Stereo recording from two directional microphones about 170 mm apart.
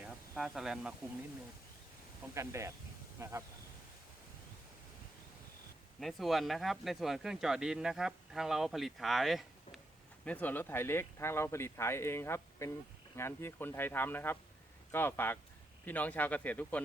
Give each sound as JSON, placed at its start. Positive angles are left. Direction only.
{"t": 0.0, "sound": "a sound", "side_deg": 0}
{"t": 2.3, "sound": "speech", "side_deg": -15}
{"t": 6.0, "sound": "speech", "side_deg": 0}